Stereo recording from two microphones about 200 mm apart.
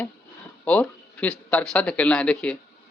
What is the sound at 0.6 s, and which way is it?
Speech, 5° left (ahead or behind).